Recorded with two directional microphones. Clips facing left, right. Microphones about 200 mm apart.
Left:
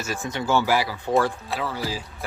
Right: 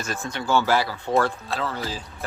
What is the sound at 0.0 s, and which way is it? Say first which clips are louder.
Speech: left 1 dB; 10° left (ahead or behind).